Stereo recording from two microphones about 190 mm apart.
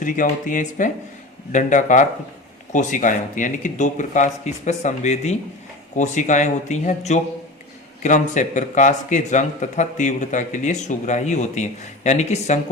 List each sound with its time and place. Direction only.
0.0 s speech: 45° left (ahead or behind)